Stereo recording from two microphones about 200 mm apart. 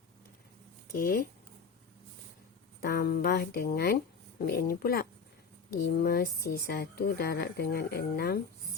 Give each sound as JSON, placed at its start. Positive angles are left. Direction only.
{"t": 0.9, "sound": "speech", "side_deg": 45}
{"t": 2.8, "sound": "speech", "side_deg": 50}